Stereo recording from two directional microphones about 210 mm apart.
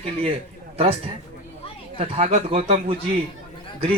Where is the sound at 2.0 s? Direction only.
30° right (ahead or behind).